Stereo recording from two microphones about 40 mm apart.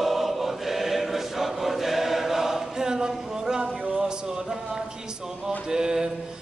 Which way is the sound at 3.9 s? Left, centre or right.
Centre.